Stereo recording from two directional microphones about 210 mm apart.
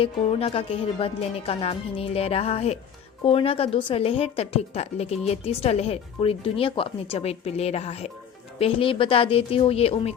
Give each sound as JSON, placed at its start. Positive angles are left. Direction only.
{"t": 0.0, "sound": "a woman's voice", "side_deg": 25}